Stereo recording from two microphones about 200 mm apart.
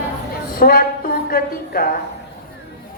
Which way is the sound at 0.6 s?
45° left (ahead or behind).